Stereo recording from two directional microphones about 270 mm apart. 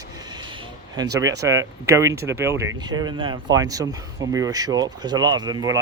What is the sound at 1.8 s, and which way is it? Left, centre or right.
Speech, centre.